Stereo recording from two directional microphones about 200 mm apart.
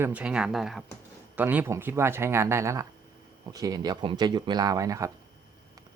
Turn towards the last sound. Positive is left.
turn(degrees=-15)  # may be behind; listen again after turning